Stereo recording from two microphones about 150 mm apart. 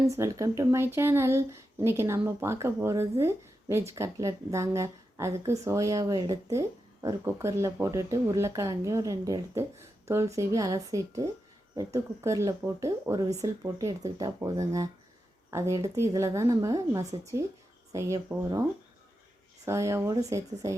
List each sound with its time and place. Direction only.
0.1 s speech: 20° right (ahead or behind)
18.3 s speech: 10° right (ahead or behind)
19.6 s speech: 20° right (ahead or behind)